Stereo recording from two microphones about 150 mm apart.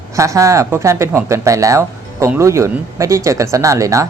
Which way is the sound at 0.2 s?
20° right (ahead or behind).